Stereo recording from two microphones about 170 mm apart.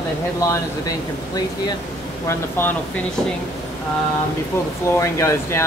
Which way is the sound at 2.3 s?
10° left (ahead or behind).